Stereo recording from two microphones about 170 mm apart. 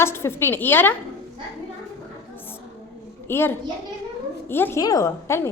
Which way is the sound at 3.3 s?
15° left (ahead or behind).